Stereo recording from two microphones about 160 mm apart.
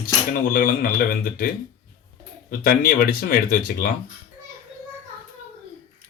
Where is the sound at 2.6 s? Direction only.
65° left (ahead or behind).